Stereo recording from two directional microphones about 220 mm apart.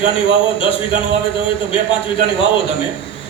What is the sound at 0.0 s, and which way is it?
A man's voice, 25° left (ahead or behind).